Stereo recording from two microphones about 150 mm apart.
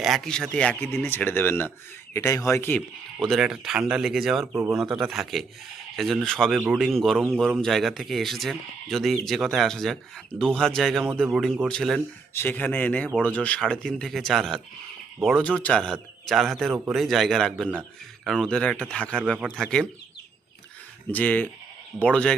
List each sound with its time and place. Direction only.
0.0 s speech: centre (ahead or behind)
4.5 s speech: 20° right (ahead or behind)
4.8 s speech: centre (ahead or behind)
12.3 s speech: 15° left (ahead or behind)
21.1 s speech: 10° left (ahead or behind)